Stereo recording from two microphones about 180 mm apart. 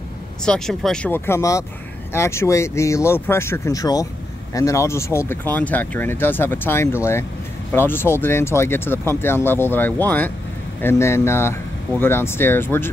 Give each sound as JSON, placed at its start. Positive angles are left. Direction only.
{"t": 0.5, "sound": "speech", "side_deg": 5}